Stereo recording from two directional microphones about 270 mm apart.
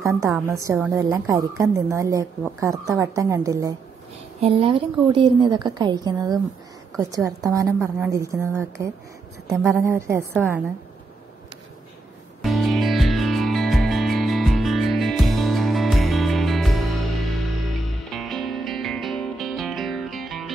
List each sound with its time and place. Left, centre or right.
0.0 s a woman's voice: centre
12.4 s music: centre